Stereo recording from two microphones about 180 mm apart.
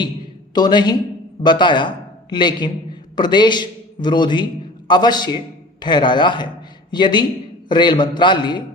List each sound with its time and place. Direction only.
0.5 s a man's voice: 25° left (ahead or behind)